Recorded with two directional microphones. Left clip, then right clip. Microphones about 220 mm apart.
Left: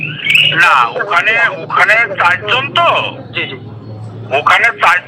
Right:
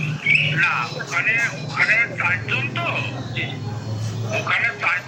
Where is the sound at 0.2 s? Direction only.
40° left (ahead or behind).